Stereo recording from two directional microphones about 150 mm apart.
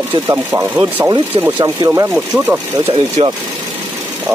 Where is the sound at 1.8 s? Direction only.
20° right (ahead or behind).